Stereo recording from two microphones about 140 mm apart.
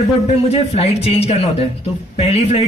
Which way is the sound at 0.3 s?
50° left (ahead or behind).